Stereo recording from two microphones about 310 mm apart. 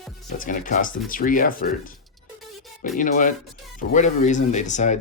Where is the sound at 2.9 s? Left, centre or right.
Left.